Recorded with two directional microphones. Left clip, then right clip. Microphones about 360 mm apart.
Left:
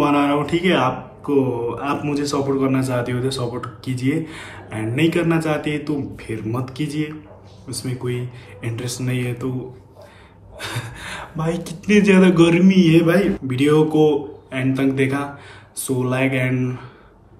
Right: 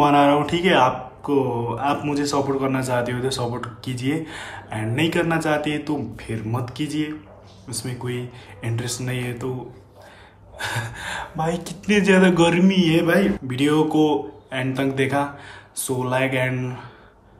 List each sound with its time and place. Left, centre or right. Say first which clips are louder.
0.0 s mantra: right 2 dB; centre
10.6 s mantra: right 2 dB; centre